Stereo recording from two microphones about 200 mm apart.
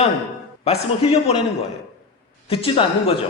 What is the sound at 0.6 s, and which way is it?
Speech, 30° left (ahead or behind).